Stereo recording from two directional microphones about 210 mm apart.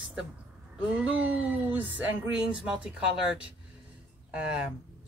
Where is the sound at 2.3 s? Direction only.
5° right (ahead or behind).